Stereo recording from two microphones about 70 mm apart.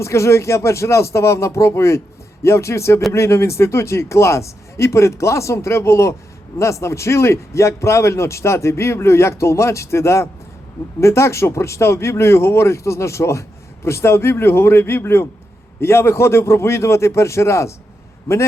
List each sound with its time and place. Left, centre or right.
0.0 s a man's voice: left